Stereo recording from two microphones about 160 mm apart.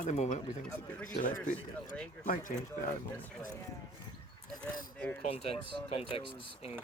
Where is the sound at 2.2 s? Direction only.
55° left (ahead or behind).